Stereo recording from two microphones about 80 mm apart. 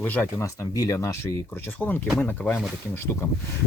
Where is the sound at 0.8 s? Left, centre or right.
Left.